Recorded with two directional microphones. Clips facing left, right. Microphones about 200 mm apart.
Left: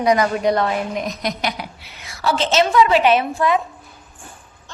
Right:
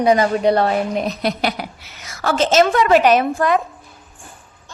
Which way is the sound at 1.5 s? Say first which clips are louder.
Right 3 dB; 45° right (ahead or behind).